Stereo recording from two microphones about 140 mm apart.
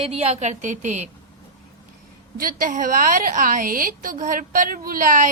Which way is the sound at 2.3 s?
85° right.